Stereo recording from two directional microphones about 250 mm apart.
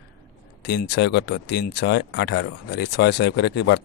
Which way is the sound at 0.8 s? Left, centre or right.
Left.